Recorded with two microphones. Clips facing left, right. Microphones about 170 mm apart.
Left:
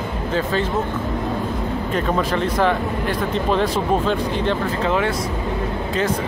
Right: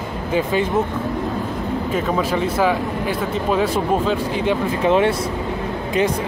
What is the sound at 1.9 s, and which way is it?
Speech, 5° right (ahead or behind).